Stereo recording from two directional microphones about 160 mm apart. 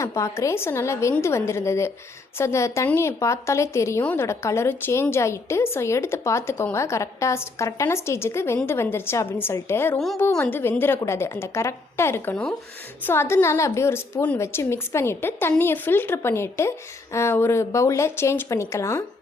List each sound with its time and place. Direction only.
0.0 s a woman's voice: 15° left (ahead or behind)